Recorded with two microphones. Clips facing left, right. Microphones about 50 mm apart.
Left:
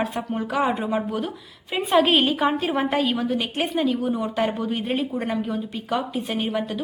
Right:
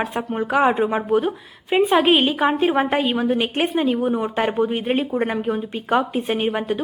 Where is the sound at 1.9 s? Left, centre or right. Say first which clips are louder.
Left 1 dB; centre.